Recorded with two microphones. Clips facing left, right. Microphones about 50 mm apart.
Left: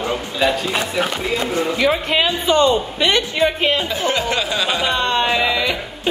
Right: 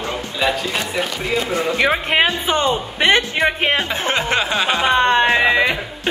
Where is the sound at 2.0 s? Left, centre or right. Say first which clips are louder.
Right 1 dB; right.